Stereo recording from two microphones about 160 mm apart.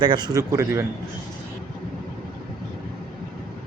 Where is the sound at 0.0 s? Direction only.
30° right (ahead or behind).